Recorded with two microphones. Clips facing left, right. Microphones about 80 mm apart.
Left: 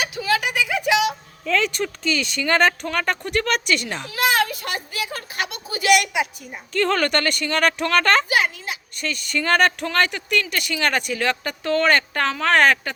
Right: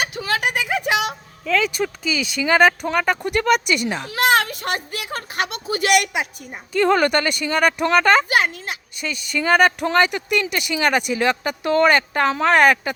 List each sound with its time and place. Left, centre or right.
0.0 s a sound: right
1.5 s speech: centre
4.0 s a sound: right
6.7 s speech: centre
8.3 s speech: right
9.0 s speech: centre